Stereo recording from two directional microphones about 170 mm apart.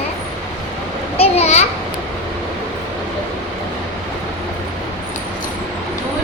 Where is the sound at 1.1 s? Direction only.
35° left (ahead or behind).